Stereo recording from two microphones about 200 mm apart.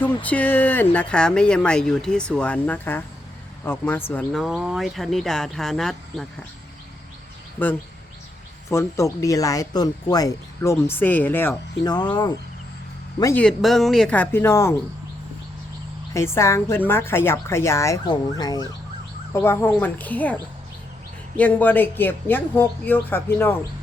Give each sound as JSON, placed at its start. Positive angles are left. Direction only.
{"t": 0.0, "sound": "speech", "side_deg": 5}
{"t": 8.7, "sound": "speech", "side_deg": 15}
{"t": 13.4, "sound": "speech", "side_deg": 0}
{"t": 16.1, "sound": "speech", "side_deg": 15}